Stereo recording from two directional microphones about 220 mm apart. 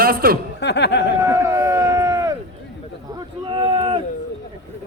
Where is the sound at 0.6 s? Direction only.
50° left (ahead or behind).